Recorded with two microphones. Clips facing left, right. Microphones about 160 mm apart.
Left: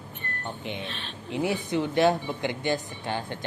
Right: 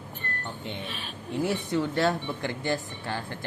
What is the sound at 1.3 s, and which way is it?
Speech, 15° left (ahead or behind).